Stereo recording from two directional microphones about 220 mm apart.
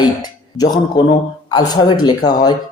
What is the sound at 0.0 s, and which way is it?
Speech, 15° left (ahead or behind).